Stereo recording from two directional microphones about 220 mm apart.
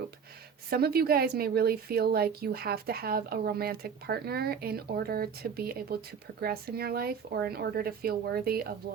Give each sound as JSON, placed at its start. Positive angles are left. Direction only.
{"t": 0.7, "sound": "a woman's voice", "side_deg": -45}